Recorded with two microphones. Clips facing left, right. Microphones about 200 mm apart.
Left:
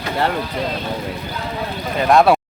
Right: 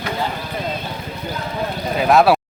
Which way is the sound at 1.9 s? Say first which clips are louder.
Left 1 dB; centre (ahead or behind).